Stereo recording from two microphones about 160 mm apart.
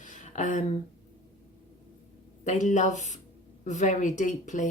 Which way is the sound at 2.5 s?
50° left (ahead or behind).